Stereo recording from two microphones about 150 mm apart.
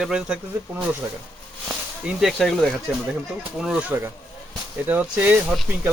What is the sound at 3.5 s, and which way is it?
Speech, 5° right (ahead or behind).